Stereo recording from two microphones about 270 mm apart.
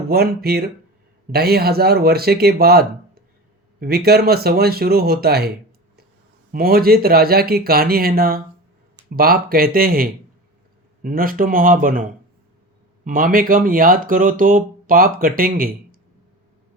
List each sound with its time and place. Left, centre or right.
0.1 s speech: right
6.5 s speech: right